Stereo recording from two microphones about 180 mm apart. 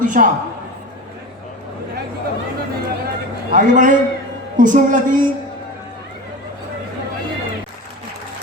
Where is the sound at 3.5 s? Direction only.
45° right (ahead or behind).